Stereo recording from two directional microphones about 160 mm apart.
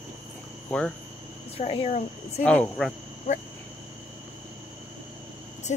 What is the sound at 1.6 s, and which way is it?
Speech, 40° left (ahead or behind).